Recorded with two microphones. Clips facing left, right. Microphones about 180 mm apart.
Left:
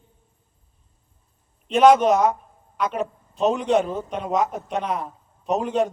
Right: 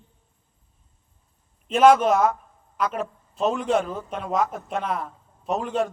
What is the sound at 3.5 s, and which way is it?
Speech, centre (ahead or behind).